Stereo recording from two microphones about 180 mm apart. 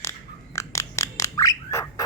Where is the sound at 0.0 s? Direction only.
15° left (ahead or behind).